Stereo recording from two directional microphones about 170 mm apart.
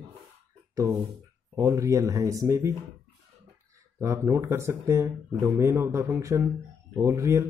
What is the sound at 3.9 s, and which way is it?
Speech, 15° right (ahead or behind).